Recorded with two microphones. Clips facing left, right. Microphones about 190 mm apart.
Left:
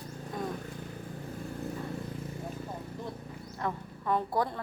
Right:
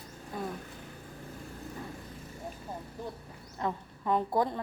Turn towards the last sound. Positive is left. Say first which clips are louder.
# right 1 dB
turn(degrees=-20)  # may be behind; listen again after turning